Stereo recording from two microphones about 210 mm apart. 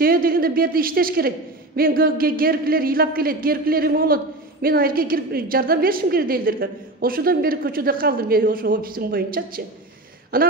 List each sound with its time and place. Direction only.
0.0 s speech: 45° right (ahead or behind)